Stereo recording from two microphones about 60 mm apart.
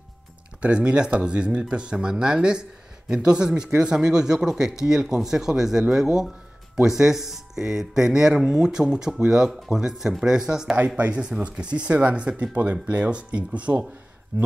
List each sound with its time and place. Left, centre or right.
0.6 s speech: centre